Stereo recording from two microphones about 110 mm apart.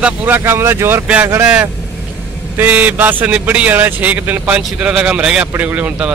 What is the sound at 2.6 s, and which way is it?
A man's voice, 15° right (ahead or behind).